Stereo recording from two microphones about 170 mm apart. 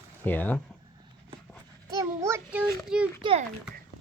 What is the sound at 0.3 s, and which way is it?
Speech, 10° left (ahead or behind).